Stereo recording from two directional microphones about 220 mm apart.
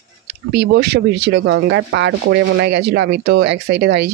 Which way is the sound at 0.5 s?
50° right (ahead or behind).